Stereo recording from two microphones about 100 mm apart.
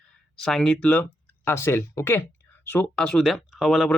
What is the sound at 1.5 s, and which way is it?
Speech, 25° left (ahead or behind).